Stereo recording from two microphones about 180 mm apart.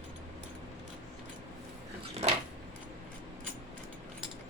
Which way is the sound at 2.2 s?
35° right (ahead or behind).